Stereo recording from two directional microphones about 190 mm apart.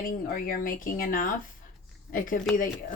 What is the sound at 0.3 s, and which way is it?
Speech, 45° left (ahead or behind).